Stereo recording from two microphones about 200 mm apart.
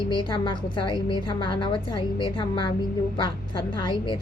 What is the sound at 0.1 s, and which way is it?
A woman's voice, 25° left (ahead or behind).